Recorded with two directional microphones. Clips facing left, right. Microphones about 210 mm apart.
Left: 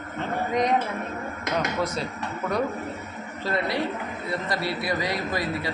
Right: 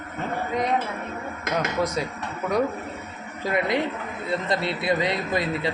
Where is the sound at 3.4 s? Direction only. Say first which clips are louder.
Right 3 dB; 15° right (ahead or behind).